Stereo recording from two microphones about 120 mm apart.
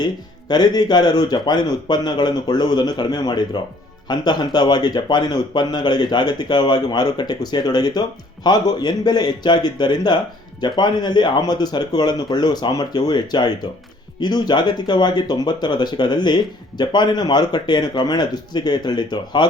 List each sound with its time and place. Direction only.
0.0 s speech: 35° left (ahead or behind)